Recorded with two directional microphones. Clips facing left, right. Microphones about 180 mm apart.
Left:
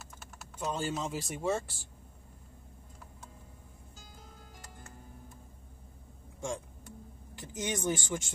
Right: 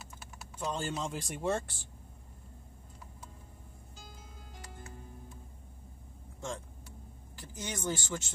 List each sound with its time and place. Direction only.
0.6 s speech: 10° left (ahead or behind)
7.3 s speech: 20° left (ahead or behind)